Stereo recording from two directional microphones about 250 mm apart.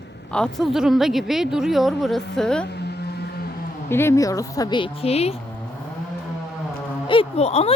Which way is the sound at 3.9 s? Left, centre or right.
Centre.